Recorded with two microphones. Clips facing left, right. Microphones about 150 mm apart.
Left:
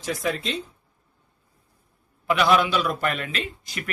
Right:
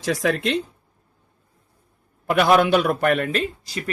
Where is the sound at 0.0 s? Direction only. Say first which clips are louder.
Right 5 dB; 90° right; by 0.6 s 75° right (ahead or behind).